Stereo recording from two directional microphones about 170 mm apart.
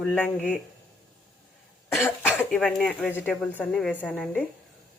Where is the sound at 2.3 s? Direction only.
5° left (ahead or behind).